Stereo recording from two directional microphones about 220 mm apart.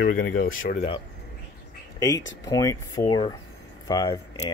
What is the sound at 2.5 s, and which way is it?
Speech, 15° left (ahead or behind).